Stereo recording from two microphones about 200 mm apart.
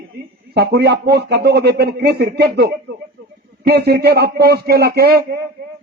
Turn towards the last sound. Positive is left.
turn(degrees=-50)  # may be behind; listen again after turning